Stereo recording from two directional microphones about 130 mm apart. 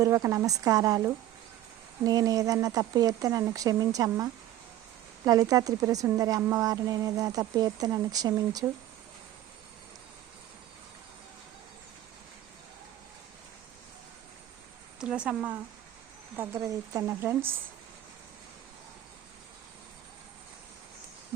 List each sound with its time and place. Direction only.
0.0 s a woman's voice: 25° right (ahead or behind)
15.0 s a woman's voice: 10° right (ahead or behind)